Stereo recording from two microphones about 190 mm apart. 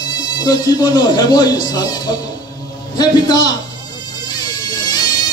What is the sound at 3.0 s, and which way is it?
Speech, 20° left (ahead or behind).